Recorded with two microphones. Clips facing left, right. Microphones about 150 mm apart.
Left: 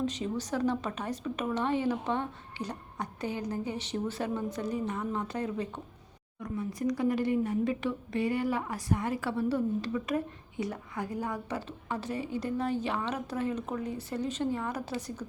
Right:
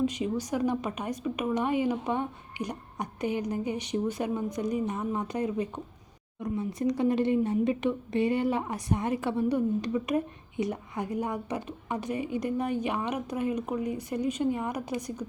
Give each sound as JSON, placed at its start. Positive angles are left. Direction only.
{"t": 0.0, "sound": "a woman's voice", "side_deg": -10}